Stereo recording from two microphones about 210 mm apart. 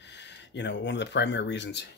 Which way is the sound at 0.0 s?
55° left (ahead or behind).